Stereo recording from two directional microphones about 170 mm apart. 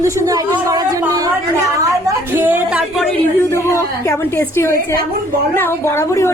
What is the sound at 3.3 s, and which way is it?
A woman's voice, 15° left (ahead or behind).